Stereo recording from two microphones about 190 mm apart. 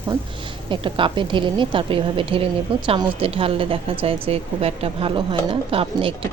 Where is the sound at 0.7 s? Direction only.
25° right (ahead or behind).